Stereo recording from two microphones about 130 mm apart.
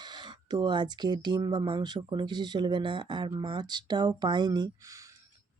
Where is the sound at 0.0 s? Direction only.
35° right (ahead or behind).